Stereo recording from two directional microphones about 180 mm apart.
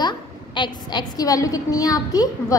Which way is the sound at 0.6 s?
25° left (ahead or behind).